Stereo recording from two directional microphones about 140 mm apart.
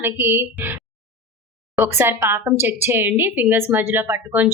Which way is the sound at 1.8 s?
15° right (ahead or behind).